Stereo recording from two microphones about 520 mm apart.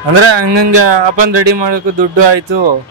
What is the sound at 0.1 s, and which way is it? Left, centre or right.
Speech, right.